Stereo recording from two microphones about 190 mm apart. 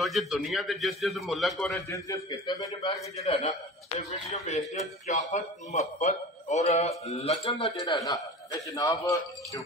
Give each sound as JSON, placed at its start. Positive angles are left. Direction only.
{"t": 0.0, "sound": "a man's voice", "side_deg": 0}
{"t": 1.9, "sound": "a man's voice", "side_deg": 20}
{"t": 2.9, "sound": "speech", "side_deg": 35}
{"t": 7.4, "sound": "a man's voice", "side_deg": 25}